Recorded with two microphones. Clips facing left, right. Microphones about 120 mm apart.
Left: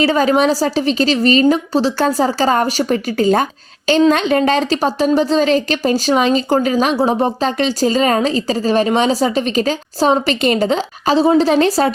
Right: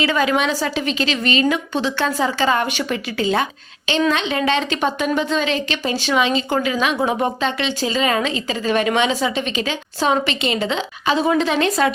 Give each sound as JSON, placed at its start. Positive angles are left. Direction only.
{"t": 0.0, "sound": "speech", "side_deg": 35}